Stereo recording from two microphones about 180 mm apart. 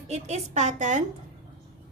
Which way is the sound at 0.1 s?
35° right (ahead or behind).